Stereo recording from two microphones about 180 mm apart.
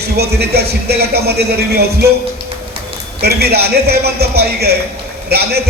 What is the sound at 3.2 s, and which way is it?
A man's voice, 60° right (ahead or behind).